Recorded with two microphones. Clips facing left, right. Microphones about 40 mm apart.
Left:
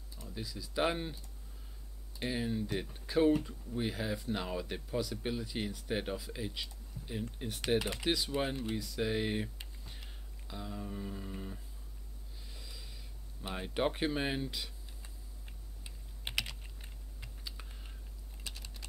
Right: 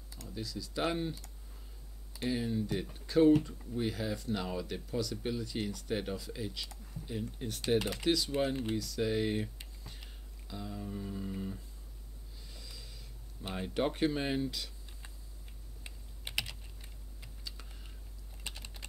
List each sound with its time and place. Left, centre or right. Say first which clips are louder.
0.3 s speech: right 2 dB; centre
2.1 s speech: right 2 dB; centre
12.4 s a sound: even; centre
13.5 s speech: even; centre
16.3 s typing: left 1 dB; left
17.2 s typing: left 1 dB; centre
18.4 s typing: right 2 dB; right